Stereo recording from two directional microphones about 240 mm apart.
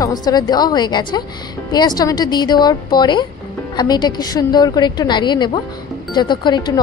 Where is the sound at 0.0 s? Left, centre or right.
Centre.